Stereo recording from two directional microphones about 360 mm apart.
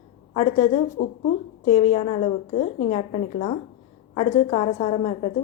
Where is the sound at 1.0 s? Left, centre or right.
Left.